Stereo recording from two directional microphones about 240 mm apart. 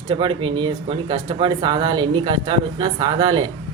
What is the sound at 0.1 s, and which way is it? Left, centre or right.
Speech, right.